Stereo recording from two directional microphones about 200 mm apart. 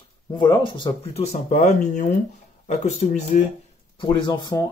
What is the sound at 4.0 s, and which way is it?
Speech, 20° left (ahead or behind).